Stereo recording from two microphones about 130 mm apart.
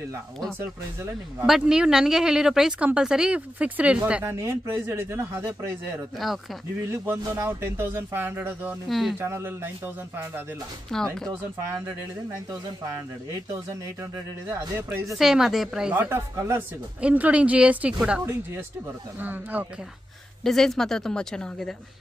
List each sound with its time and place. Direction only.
1.4 s speech: 5° right (ahead or behind); by 5.7 s 25° right (ahead or behind)
6.1 s speech: centre (ahead or behind)
6.8 s speech: 20° right (ahead or behind)
8.8 s speech: centre (ahead or behind)
9.2 s speech: 15° right (ahead or behind)
10.9 s speech: 5° left (ahead or behind)
15.1 s speech: 5° right (ahead or behind)
20.4 s speech: 5° left (ahead or behind)